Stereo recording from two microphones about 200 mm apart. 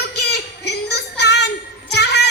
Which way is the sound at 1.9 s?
55° left (ahead or behind).